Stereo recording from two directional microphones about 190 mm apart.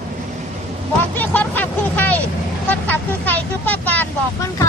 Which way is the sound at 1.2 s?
10° left (ahead or behind).